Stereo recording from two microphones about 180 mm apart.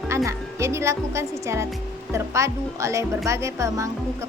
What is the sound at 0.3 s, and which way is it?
A woman's voice, 15° right (ahead or behind).